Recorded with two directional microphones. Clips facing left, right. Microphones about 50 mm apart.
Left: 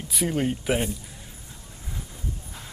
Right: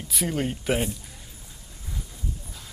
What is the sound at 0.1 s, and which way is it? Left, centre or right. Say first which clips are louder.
Speech: left 2 dB; centre.